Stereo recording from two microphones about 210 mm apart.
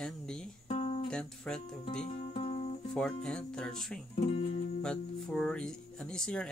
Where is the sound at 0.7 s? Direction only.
30° left (ahead or behind).